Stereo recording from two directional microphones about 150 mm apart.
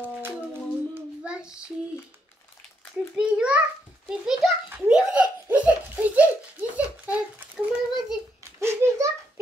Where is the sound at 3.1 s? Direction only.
5° right (ahead or behind).